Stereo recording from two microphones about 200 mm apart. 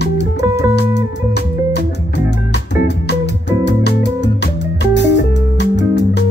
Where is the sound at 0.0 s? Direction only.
60° left (ahead or behind).